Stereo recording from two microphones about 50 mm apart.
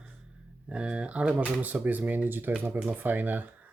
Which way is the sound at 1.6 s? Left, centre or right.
Right.